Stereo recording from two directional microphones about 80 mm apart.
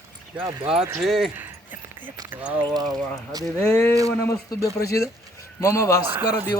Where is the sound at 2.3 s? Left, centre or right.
Centre.